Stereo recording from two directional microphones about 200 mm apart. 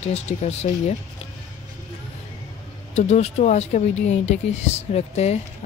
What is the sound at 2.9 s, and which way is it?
Speech, 35° left (ahead or behind).